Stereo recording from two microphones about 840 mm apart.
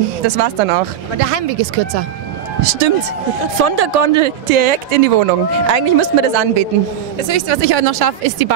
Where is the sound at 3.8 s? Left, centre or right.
Right.